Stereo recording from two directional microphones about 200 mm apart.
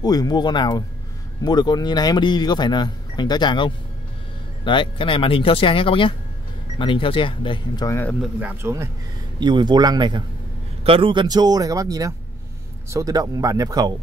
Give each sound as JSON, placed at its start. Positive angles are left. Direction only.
{"t": 0.0, "sound": "speech", "side_deg": 20}
{"t": 8.2, "sound": "speech", "side_deg": -10}